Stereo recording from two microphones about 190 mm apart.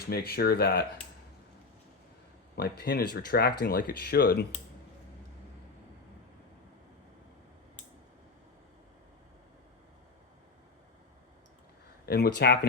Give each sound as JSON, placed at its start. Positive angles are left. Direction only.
{"t": 0.1, "sound": "speech", "side_deg": 55}
{"t": 2.6, "sound": "speech", "side_deg": 55}
{"t": 12.0, "sound": "speech", "side_deg": 55}